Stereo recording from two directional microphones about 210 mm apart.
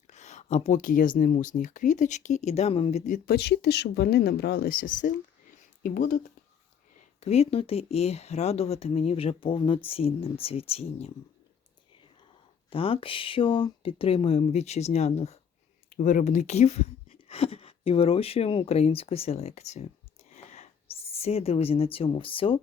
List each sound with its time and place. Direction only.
0.1 s speech: 35° left (ahead or behind)
3.2 s speech: 50° left (ahead or behind)
7.2 s speech: 30° left (ahead or behind)
12.7 s speech: 25° left (ahead or behind)